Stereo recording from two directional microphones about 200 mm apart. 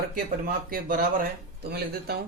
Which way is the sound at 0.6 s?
45° right (ahead or behind).